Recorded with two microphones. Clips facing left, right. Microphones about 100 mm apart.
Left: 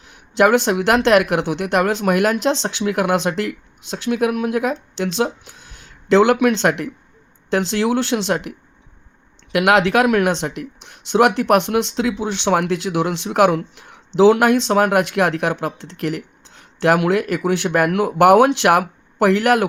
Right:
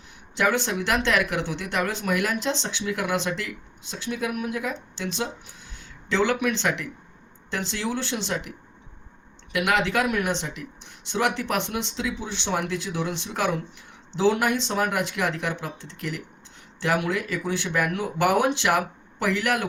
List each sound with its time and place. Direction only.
0.1 s speech: 75° left (ahead or behind)
7.5 s speech: 75° left (ahead or behind)